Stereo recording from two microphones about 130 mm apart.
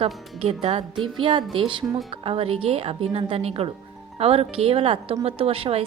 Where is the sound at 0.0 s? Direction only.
50° right (ahead or behind).